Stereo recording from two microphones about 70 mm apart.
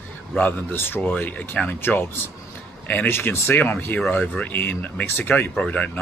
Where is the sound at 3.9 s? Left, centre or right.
Centre.